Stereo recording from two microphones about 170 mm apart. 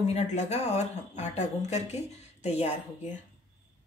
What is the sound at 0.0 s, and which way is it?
Speech, 40° left (ahead or behind).